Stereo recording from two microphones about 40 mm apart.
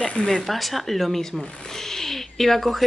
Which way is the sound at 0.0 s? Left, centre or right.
Left.